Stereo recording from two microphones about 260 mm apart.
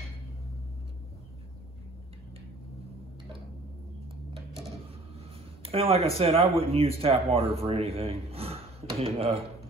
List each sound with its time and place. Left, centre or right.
5.6 s speech: right